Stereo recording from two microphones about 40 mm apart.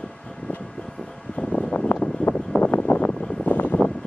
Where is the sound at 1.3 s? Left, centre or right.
Left.